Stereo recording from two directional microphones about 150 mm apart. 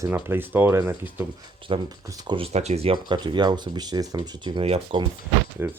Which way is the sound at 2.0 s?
30° right (ahead or behind).